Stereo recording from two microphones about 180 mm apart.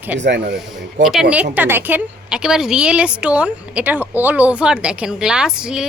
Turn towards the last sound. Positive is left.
turn(degrees=-5)  # may be behind; listen again after turning